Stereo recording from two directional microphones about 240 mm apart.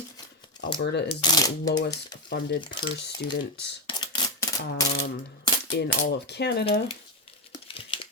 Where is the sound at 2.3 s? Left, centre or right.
Left.